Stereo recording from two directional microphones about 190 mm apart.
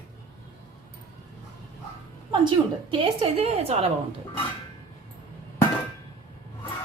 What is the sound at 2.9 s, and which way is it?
A woman's voice, 30° right (ahead or behind).